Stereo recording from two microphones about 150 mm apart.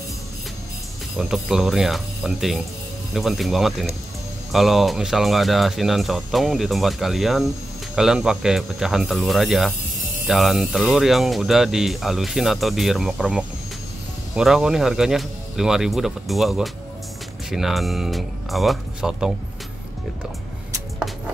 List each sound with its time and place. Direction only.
1.1 s speech: 5° right (ahead or behind)